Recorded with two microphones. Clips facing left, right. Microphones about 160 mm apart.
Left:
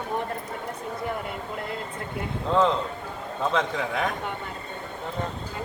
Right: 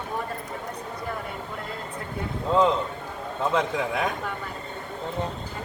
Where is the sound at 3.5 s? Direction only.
5° right (ahead or behind).